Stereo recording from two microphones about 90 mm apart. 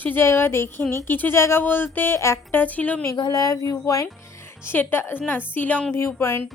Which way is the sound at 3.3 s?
45° left (ahead or behind).